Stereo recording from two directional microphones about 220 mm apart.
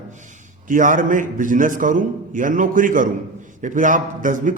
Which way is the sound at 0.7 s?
35° right (ahead or behind).